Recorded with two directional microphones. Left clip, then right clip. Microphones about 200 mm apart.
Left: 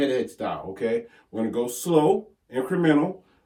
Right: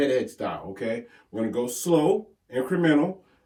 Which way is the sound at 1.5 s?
15° left (ahead or behind).